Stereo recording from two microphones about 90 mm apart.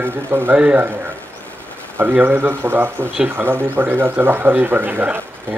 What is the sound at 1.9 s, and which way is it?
Speech, 20° right (ahead or behind).